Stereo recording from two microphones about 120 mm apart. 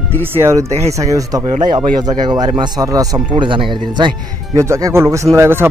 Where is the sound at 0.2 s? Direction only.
20° right (ahead or behind).